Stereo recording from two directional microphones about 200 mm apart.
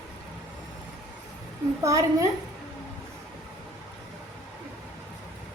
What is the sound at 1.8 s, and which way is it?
Speech, 15° right (ahead or behind).